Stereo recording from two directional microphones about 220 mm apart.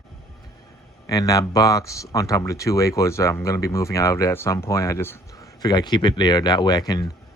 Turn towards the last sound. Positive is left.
turn(degrees=20)  # may be behind; listen again after turning